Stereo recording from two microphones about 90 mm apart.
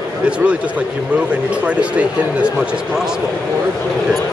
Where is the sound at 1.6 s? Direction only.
15° right (ahead or behind).